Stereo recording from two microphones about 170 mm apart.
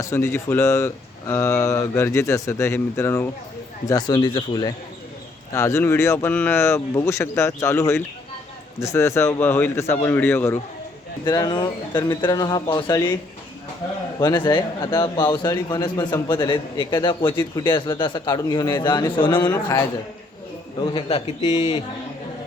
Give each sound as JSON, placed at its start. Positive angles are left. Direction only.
{"t": 0.0, "sound": "a man's voice", "side_deg": 15}
{"t": 14.2, "sound": "a man's voice", "side_deg": 25}
{"t": 20.8, "sound": "a man's voice", "side_deg": 30}